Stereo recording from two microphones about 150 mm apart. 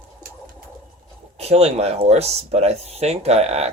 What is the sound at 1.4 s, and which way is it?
Speech, 45° right (ahead or behind).